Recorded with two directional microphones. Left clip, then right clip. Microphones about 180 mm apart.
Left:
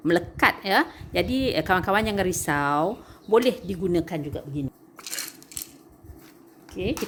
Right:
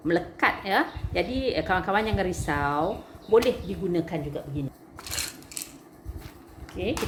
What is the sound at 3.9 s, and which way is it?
Speech, 65° left (ahead or behind).